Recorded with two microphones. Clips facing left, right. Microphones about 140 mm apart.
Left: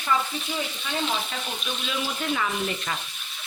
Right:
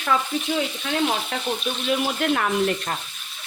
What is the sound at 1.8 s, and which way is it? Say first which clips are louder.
Speech: right 7 dB; 60° right (ahead or behind).